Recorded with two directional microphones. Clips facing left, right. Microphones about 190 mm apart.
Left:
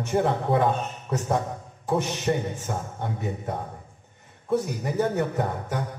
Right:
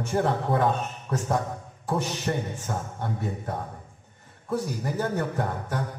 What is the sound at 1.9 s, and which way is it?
A man's voice, 20° left (ahead or behind).